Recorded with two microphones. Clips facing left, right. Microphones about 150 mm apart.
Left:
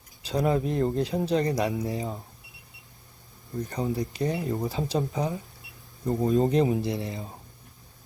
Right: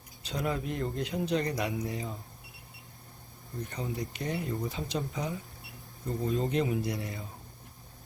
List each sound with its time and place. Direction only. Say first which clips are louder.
0.2 s speech: left 8 dB; 35° left (ahead or behind)
3.7 s speech: left 7 dB; 35° left (ahead or behind)